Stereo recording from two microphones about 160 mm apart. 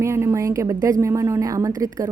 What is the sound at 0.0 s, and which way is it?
A woman's voice, 15° right (ahead or behind).